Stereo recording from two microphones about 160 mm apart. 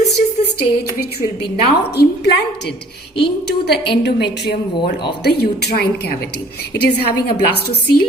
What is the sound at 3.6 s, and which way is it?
A woman's voice, 90° left.